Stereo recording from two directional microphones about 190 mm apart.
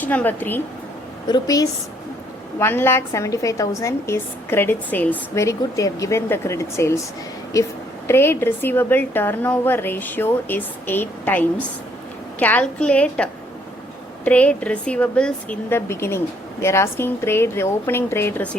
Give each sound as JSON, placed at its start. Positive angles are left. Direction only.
{"t": 0.0, "sound": "a woman's voice", "side_deg": 10}